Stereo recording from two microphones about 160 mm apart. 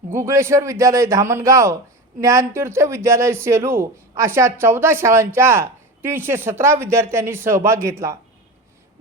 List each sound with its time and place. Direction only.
0.1 s a man's voice: 15° right (ahead or behind)